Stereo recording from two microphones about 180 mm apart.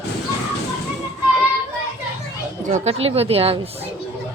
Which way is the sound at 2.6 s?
40° right (ahead or behind).